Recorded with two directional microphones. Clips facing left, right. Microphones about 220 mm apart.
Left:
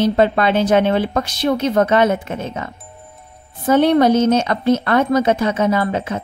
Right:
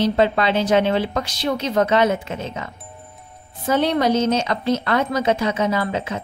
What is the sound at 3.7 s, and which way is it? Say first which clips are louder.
A woman's voice: left 6 dB; 55° left (ahead or behind).